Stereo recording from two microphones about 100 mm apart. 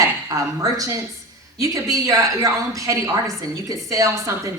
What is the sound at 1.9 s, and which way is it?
A woman's voice, 35° right (ahead or behind).